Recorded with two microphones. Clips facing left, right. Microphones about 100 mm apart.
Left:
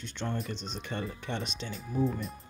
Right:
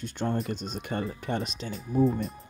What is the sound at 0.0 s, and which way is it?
Speech, 45° right (ahead or behind).